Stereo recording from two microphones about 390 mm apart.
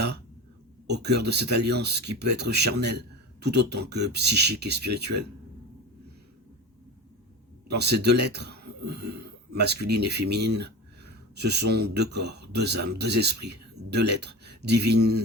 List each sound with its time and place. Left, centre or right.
0.9 s speech: right
7.7 s speech: right